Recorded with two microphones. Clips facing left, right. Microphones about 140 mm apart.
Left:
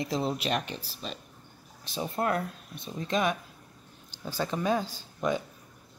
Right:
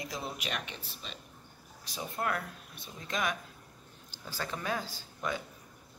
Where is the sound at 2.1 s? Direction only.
25° left (ahead or behind).